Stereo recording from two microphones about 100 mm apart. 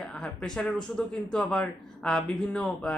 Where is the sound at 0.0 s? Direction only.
10° left (ahead or behind).